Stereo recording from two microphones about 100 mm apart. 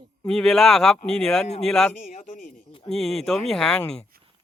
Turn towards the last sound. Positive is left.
turn(degrees=10)  # may be behind; listen again after turning